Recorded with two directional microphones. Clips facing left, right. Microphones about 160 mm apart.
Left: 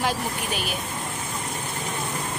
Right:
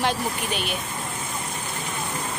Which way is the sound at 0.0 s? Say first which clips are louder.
Right 1 dB; 5° left (ahead or behind).